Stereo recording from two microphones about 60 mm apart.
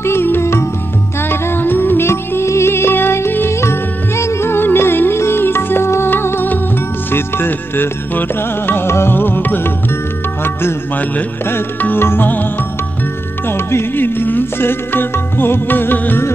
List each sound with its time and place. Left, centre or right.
0.0 s music: left
13.5 s music: left